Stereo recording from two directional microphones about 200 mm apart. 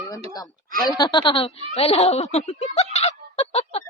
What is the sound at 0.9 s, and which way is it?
Speech, 20° left (ahead or behind).